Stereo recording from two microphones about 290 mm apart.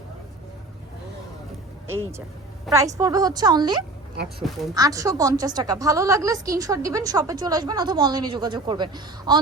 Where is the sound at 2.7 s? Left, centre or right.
Centre.